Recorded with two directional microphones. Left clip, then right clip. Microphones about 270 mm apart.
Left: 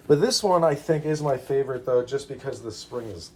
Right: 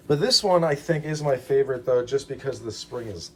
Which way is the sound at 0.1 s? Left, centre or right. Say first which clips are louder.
Even; left.